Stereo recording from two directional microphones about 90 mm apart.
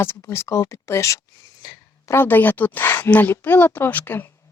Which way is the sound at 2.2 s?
20° left (ahead or behind).